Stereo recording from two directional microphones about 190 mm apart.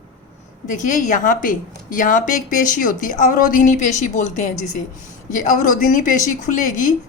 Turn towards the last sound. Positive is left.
turn(degrees=45)  # may be behind; listen again after turning